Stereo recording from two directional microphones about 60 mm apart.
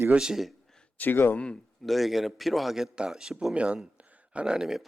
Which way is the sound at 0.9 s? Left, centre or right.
Left.